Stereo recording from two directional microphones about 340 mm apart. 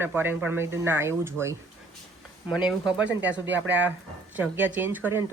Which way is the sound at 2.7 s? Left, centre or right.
Centre.